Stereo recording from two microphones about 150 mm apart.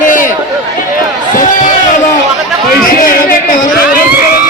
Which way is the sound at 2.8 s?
65° left (ahead or behind).